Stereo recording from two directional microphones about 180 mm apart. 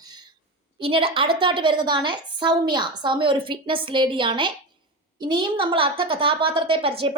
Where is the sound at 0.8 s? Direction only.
30° right (ahead or behind).